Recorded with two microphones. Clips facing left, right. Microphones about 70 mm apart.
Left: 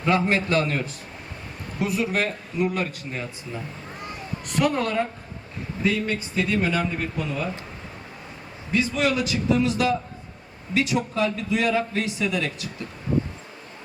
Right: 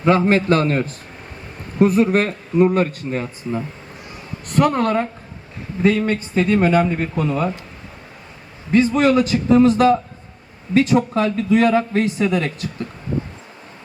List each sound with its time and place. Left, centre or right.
0.1 s a man's voice: right
8.7 s a man's voice: right